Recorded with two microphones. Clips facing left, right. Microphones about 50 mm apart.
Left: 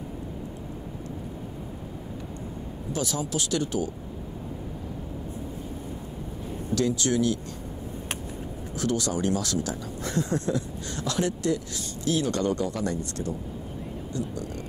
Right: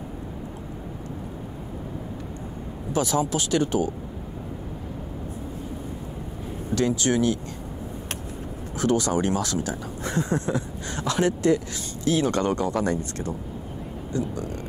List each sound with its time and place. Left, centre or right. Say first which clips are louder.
2.9 s speech: right 6 dB; right
6.7 s speech: right 2 dB; right
8.8 s speech: right 4 dB; right